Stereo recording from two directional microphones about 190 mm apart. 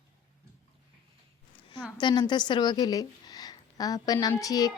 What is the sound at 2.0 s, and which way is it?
A woman's voice, 25° left (ahead or behind).